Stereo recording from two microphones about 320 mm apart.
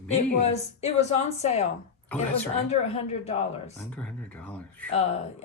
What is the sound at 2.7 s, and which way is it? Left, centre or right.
A woman's voice, centre.